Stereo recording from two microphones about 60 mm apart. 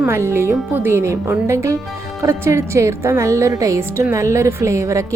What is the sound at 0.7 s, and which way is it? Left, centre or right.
Speech, right.